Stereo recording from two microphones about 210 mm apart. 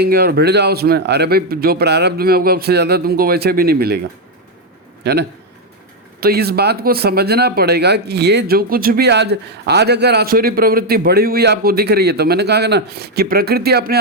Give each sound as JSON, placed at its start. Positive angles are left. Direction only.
{"t": 0.0, "sound": "speech", "side_deg": -50}
{"t": 6.1, "sound": "speech", "side_deg": -50}